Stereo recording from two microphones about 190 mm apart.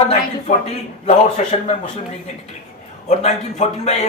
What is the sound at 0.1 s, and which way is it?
A man's voice, 35° left (ahead or behind).